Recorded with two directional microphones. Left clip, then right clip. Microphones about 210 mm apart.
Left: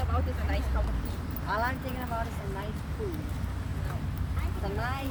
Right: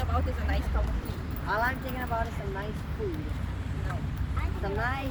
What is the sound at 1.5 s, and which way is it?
Speech, 45° right (ahead or behind).